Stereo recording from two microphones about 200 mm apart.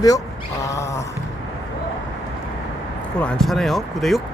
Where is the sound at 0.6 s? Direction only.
15° left (ahead or behind).